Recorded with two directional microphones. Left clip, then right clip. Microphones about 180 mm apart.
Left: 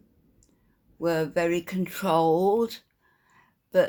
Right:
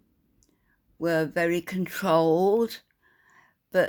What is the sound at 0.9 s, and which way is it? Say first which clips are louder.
Speech: even; 45° right (ahead or behind).